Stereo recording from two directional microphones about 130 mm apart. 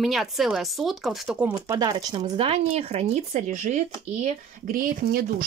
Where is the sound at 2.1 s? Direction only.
45° right (ahead or behind); by 4.9 s 90° right.